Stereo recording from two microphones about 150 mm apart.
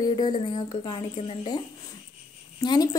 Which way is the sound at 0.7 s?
40° left (ahead or behind).